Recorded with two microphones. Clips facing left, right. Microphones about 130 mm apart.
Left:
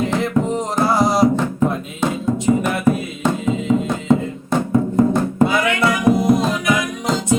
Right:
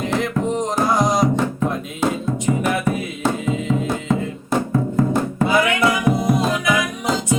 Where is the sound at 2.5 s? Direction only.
20° left (ahead or behind).